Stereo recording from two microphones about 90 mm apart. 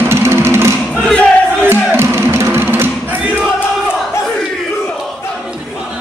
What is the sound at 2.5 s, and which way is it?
Music, 25° right (ahead or behind).